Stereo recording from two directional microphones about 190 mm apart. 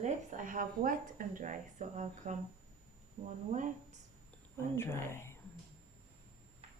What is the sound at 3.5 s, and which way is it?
Speech, 40° right (ahead or behind).